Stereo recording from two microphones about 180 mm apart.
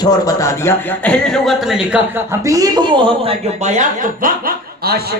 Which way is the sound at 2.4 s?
20° right (ahead or behind).